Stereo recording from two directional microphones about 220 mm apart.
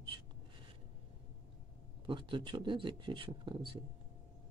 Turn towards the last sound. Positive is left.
turn(degrees=-25)  # may be behind; listen again after turning